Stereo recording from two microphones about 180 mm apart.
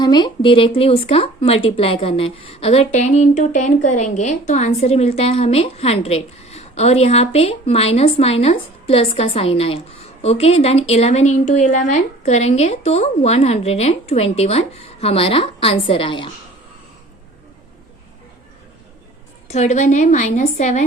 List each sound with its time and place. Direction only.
0.0 s speech: 25° left (ahead or behind)
19.5 s speech: 40° left (ahead or behind)